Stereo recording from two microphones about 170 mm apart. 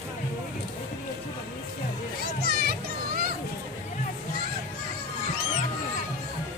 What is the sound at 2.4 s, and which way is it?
Children playing, 65° right (ahead or behind).